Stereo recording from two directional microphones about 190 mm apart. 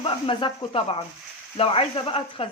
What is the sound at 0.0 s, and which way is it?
Speech, 25° left (ahead or behind).